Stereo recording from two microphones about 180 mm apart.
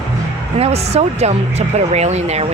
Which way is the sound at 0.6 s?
35° right (ahead or behind).